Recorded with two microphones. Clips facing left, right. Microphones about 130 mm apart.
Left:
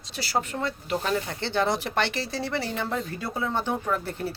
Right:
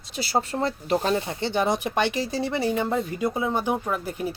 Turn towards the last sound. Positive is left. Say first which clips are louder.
# right 1 dB
turn(degrees=-10)  # may be behind; listen again after turning